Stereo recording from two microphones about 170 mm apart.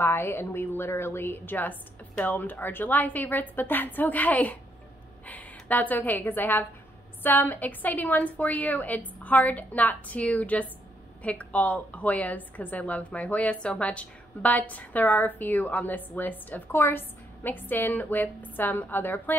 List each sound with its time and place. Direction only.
0.0 s a woman's voice: 15° left (ahead or behind)